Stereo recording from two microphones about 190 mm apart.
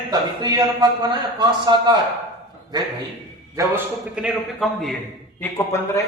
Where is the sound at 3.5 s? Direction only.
10° right (ahead or behind).